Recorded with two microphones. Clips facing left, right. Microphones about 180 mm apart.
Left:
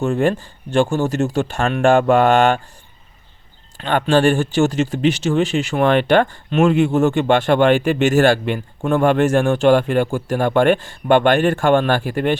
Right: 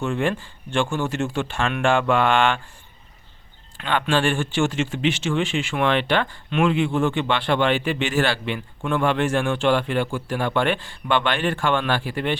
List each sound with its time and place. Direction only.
0.0 s speech: 40° left (ahead or behind)
3.8 s speech: 40° left (ahead or behind)